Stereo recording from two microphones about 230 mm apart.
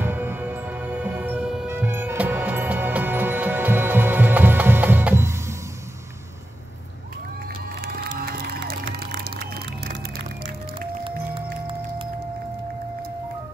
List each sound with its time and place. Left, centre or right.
0.0 s music: centre
7.8 s crowd: right